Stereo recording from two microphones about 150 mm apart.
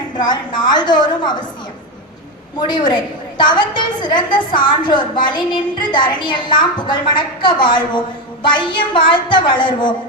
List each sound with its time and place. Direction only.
0.2 s a woman's voice: 30° left (ahead or behind)
2.6 s a woman's voice: 30° left (ahead or behind)